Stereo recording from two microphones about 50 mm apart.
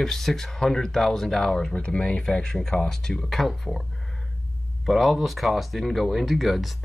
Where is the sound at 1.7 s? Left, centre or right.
Left; by 3.8 s centre.